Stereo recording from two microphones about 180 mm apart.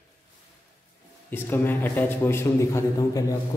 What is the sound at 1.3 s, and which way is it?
A man's voice, 10° left (ahead or behind).